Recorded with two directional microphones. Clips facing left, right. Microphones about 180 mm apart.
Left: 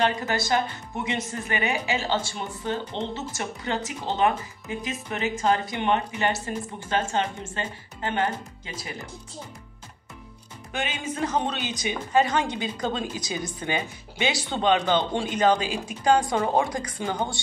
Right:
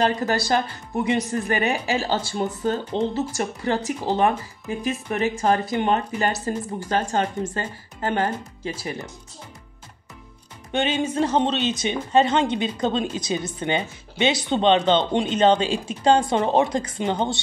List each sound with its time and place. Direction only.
0.0 s speech: 35° right (ahead or behind)
10.7 s speech: 30° right (ahead or behind)